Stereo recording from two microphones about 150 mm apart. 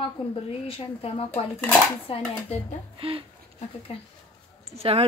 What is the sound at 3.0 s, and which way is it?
Speech, 35° right (ahead or behind).